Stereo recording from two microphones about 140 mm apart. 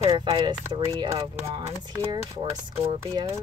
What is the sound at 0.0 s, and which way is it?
Speech, 35° right (ahead or behind).